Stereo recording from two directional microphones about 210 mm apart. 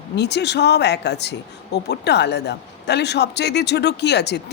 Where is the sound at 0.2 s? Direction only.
55° left (ahead or behind).